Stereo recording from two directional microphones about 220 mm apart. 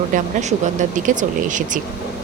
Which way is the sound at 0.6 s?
35° right (ahead or behind).